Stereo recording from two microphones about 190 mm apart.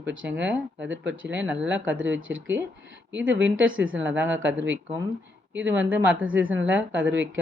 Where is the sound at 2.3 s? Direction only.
65° right (ahead or behind).